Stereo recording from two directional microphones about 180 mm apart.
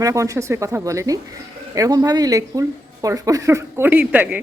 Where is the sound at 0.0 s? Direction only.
15° right (ahead or behind).